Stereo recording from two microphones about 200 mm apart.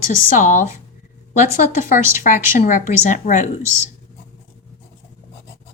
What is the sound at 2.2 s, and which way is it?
A woman's voice, 40° left (ahead or behind).